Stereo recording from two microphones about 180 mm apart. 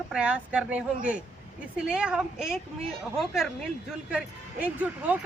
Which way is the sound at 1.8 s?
5° right (ahead or behind).